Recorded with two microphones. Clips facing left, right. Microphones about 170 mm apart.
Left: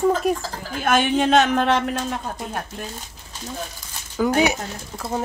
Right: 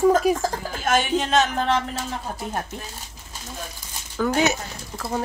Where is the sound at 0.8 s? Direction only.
55° left (ahead or behind); by 2.0 s 75° left (ahead or behind).